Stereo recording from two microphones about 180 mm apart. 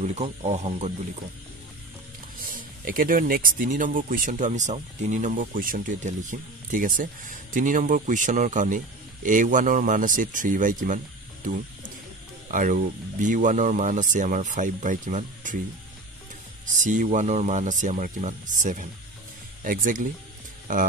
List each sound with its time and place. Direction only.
0.0 s speech: 40° right (ahead or behind)
2.4 s speech: 50° right (ahead or behind)
12.4 s speech: 50° right (ahead or behind)
16.7 s speech: 45° right (ahead or behind)